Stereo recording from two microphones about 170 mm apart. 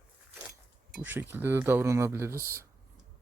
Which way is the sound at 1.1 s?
10° right (ahead or behind).